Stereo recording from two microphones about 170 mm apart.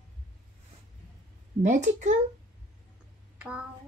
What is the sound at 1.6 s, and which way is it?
Speech, 45° right (ahead or behind).